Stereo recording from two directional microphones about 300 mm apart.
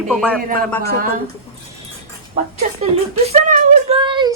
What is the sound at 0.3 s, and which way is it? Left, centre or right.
Speech, right.